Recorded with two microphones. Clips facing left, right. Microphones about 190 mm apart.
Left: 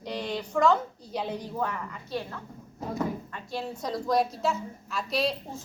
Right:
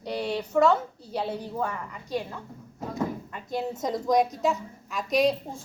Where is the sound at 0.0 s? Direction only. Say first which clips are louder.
Right 3 dB; 10° right (ahead or behind).